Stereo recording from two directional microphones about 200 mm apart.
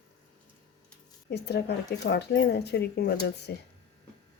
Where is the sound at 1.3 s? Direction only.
55° left (ahead or behind).